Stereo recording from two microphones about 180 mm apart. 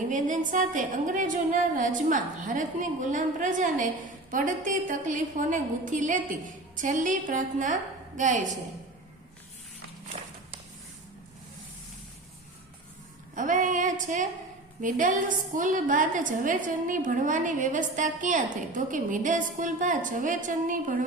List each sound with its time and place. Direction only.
0.1 s a woman's voice: 45° right (ahead or behind)
13.3 s a woman's voice: 45° right (ahead or behind)